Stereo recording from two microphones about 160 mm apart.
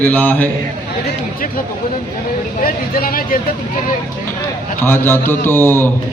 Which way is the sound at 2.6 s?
65° left (ahead or behind).